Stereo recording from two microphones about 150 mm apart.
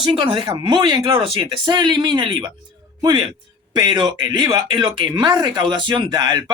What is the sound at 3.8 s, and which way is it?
Speech, 30° right (ahead or behind).